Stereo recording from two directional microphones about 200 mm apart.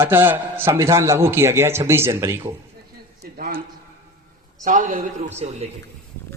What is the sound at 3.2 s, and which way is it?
Speech, 50° right (ahead or behind).